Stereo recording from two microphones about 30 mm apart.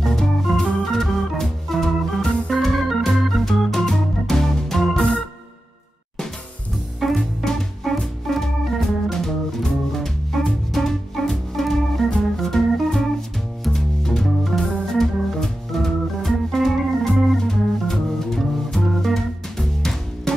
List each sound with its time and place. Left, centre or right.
0.0 s organ: centre
4.6 s music: centre
7.2 s music: centre
8.3 s organ: centre
13.7 s music: centre
14.2 s organ: centre
17.5 s music: centre
20.3 s music: left